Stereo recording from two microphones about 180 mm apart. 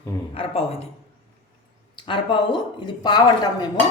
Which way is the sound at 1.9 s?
30° left (ahead or behind).